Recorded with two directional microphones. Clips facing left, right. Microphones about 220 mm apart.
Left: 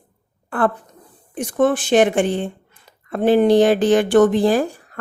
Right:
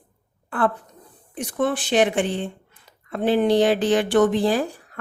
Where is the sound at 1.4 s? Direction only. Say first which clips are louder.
Left 6 dB; 45° left (ahead or behind).